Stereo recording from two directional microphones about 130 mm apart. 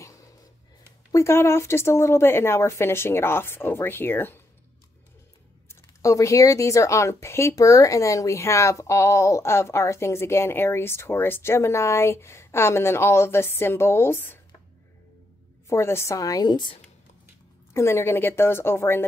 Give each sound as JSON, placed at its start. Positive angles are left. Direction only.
{"t": 1.1, "sound": "a woman's voice", "side_deg": 20}
{"t": 5.7, "sound": "a woman's voice", "side_deg": 25}
{"t": 15.7, "sound": "a woman's voice", "side_deg": 20}
{"t": 17.7, "sound": "a woman's voice", "side_deg": 20}